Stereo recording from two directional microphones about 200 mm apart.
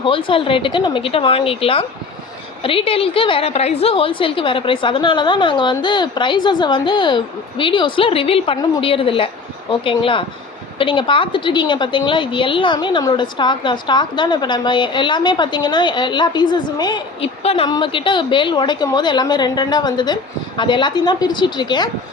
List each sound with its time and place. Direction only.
0.0 s a woman's voice: 25° left (ahead or behind)